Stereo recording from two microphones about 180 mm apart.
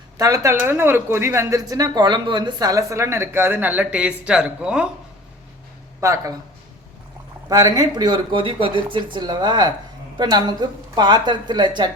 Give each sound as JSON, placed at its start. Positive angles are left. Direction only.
{"t": 0.2, "sound": "speech", "side_deg": -15}
{"t": 6.0, "sound": "speech", "side_deg": -15}
{"t": 7.4, "sound": "a woman's voice", "side_deg": -20}